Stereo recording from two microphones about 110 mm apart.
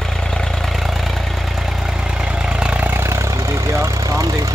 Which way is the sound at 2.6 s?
10° right (ahead or behind).